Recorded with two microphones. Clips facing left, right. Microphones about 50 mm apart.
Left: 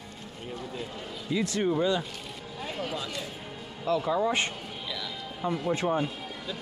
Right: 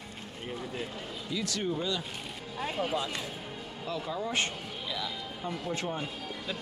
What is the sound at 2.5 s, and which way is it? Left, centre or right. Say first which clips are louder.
Speech: right 3 dB; centre.